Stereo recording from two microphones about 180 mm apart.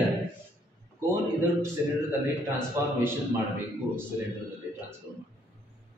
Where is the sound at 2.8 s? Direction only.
15° right (ahead or behind).